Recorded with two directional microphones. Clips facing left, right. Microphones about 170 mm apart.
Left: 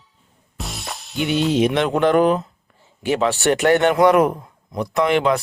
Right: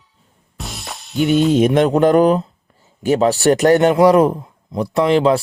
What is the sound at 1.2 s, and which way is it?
Speech, 45° right (ahead or behind).